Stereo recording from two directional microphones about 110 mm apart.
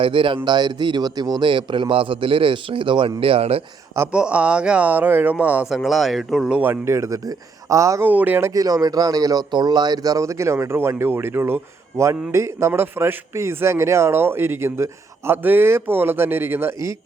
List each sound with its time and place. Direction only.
0.0 s a man's voice: 50° right (ahead or behind)
4.1 s speech: 10° right (ahead or behind)
6.6 s speech: 20° right (ahead or behind)
8.0 s speech: 15° right (ahead or behind)